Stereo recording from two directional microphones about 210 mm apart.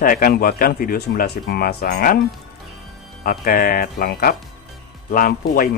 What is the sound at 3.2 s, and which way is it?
A man's voice, 45° left (ahead or behind).